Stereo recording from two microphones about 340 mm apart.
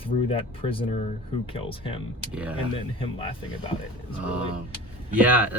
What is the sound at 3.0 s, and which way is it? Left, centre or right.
Speech, centre.